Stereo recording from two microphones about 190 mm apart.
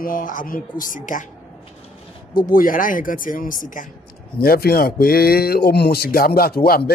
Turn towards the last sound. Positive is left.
turn(degrees=55)  # may be behind; listen again after turning